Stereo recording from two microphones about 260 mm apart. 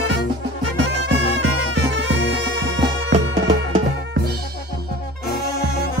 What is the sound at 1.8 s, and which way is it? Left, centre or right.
Music, right.